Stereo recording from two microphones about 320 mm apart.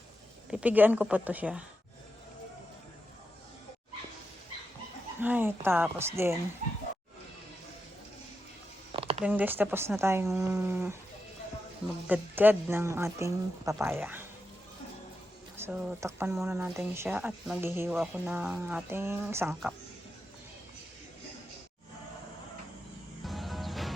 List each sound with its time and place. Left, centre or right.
0.5 s a woman's voice: centre
5.2 s speech: centre
8.9 s a sound: centre
9.2 s speech: centre
12.0 s speech: centre
15.5 s speech: centre
23.2 s music: centre